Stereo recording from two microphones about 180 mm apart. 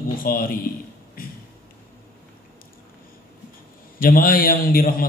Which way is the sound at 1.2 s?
55° left (ahead or behind).